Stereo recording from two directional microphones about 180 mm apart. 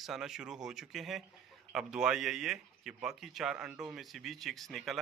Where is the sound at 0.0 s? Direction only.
Centre (ahead or behind).